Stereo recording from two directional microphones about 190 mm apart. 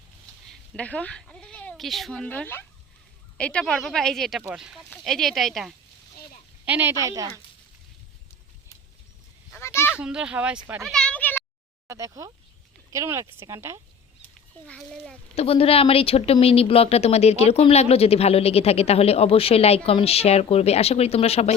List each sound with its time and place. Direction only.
0.8 s speech: 5° left (ahead or behind); by 7.4 s 15° right (ahead or behind)
9.6 s a sound: 15° left (ahead or behind)
9.9 s speech: 5° right (ahead or behind)
10.8 s a sound: 5° left (ahead or behind)
11.9 s speech: 15° right (ahead or behind)
14.7 s speech: 5° left (ahead or behind)
15.4 s speech: 30° left (ahead or behind)